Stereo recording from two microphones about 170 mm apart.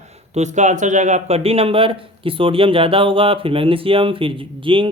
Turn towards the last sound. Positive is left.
turn(degrees=-30)  # may be behind; listen again after turning